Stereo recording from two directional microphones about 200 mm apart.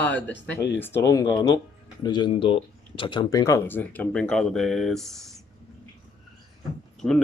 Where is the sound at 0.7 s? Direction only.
10° left (ahead or behind).